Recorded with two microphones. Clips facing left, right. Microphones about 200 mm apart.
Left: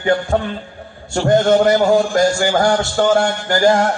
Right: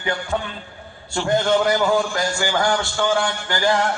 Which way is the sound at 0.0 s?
45° left (ahead or behind).